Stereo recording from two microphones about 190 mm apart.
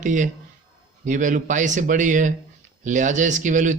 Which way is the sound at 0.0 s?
40° right (ahead or behind).